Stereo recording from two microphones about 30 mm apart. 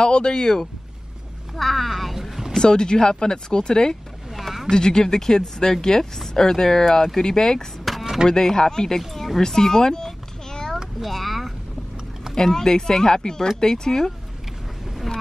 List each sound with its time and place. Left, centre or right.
0.0 s speech: left
1.6 s speech: centre
2.1 s boat: centre
2.6 s speech: left
4.4 s a sound: centre
4.6 s speech: left
7.2 s speech: left
7.9 s a sound: centre
8.3 s speech: left
9.1 s speech: centre
9.4 s speech: centre
10.0 s a sound: centre
11.0 s speech: centre
12.4 s speech: centre